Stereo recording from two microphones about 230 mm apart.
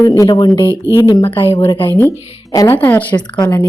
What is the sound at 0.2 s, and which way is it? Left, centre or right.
A woman's voice, centre.